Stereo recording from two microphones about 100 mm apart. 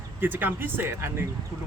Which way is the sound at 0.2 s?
20° right (ahead or behind).